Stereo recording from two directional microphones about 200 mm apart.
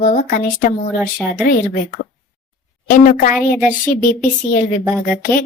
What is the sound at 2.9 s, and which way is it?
Speech, 40° left (ahead or behind).